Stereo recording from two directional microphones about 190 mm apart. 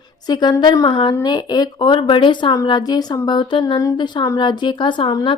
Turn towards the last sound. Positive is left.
turn(degrees=25)  # may be behind; listen again after turning